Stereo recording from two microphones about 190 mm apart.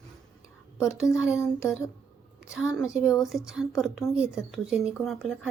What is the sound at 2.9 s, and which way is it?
Speech, 15° left (ahead or behind).